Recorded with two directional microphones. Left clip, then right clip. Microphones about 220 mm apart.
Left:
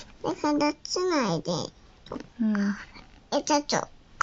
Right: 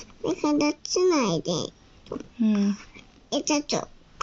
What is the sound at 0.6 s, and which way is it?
A child's voice, 20° left (ahead or behind).